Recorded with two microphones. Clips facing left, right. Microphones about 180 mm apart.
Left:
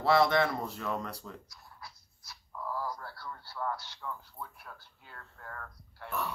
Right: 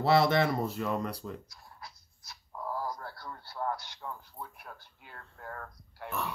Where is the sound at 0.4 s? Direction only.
20° right (ahead or behind).